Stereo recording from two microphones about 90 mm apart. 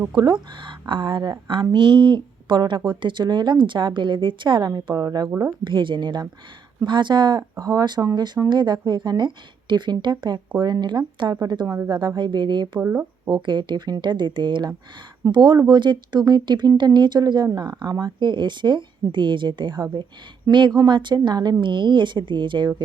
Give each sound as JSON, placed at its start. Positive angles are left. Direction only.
{"t": 0.2, "sound": "speech", "side_deg": -60}
{"t": 4.6, "sound": "a woman's voice", "side_deg": -45}
{"t": 5.6, "sound": "speech", "side_deg": -65}
{"t": 7.5, "sound": "speech", "side_deg": -35}
{"t": 8.4, "sound": "speech", "side_deg": -60}
{"t": 11.6, "sound": "speech", "side_deg": -30}
{"t": 11.9, "sound": "speech", "side_deg": -55}
{"t": 12.8, "sound": "speech", "side_deg": -20}
{"t": 13.2, "sound": "speech", "side_deg": -55}